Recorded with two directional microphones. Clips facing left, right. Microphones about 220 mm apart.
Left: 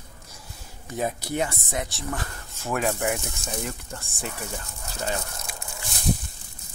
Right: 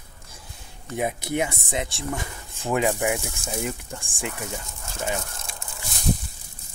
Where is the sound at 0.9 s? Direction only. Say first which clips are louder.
Right 2 dB; 15° right (ahead or behind).